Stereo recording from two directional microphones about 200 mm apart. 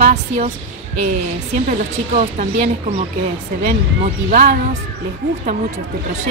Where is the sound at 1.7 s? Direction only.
40° right (ahead or behind).